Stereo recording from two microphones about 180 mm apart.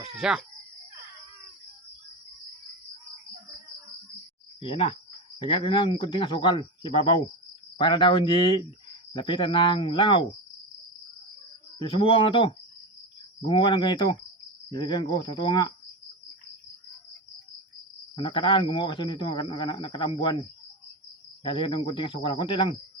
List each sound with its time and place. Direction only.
0.0 s speech: 5° right (ahead or behind)
4.6 s a man's voice: 30° left (ahead or behind)
11.8 s a man's voice: 25° left (ahead or behind)
18.2 s a man's voice: 25° left (ahead or behind)
21.4 s a man's voice: 30° left (ahead or behind)